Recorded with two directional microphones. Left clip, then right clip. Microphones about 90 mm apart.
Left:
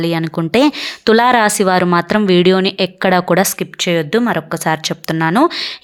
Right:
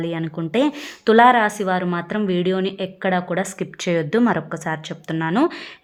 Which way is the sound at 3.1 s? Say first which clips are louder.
Left 8 dB; 75° left (ahead or behind).